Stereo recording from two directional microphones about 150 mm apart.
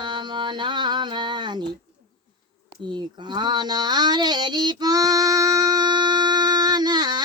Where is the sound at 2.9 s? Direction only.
30° right (ahead or behind).